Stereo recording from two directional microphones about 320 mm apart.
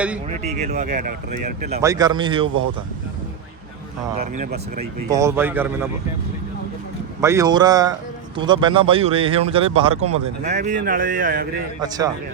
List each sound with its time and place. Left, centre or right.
0.4 s speech: right
1.8 s speech: centre
4.2 s speech: right
5.1 s speech: centre
7.2 s speech: centre; by 11.6 s right
11.8 s speech: centre